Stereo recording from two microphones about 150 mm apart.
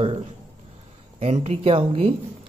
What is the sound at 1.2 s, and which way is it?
Speech, 45° right (ahead or behind).